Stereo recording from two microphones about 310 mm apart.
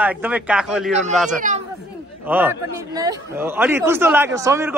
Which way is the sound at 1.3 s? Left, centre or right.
Right.